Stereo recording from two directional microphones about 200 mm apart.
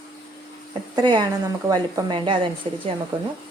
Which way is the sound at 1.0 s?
20° right (ahead or behind).